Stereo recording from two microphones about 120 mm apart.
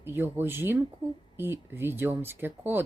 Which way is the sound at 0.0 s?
20° right (ahead or behind).